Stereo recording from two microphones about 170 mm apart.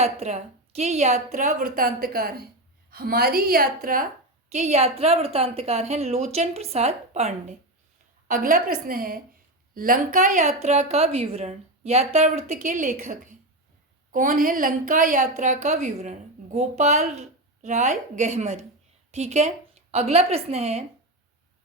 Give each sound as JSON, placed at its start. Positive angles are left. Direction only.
{"t": 0.0, "sound": "a woman's voice", "side_deg": -40}
{"t": 4.5, "sound": "a woman's voice", "side_deg": -40}
{"t": 8.3, "sound": "a woman's voice", "side_deg": -55}